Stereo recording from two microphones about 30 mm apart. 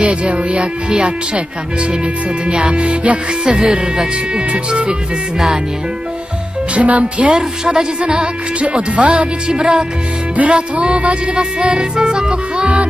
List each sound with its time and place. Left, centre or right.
0.0 s speech: right
2.4 s music: right
4.5 s speech: right
6.7 s speech: right
7.3 s speech: right
8.1 s music: right
8.9 s speech: right
9.5 s music: right